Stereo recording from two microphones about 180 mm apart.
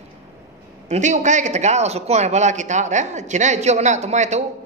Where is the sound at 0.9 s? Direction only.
40° right (ahead or behind).